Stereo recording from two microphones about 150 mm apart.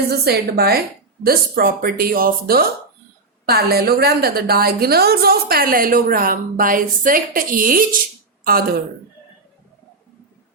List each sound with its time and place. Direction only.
0.1 s a woman's voice: 90° right; by 7.9 s 70° right (ahead or behind)